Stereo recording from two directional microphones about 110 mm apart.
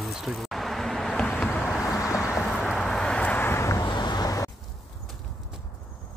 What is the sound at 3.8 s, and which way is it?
Vehicle, 40° left (ahead or behind).